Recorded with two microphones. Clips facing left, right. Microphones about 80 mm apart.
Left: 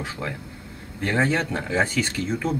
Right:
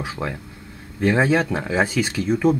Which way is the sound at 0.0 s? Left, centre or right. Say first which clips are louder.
Right 3 dB; centre.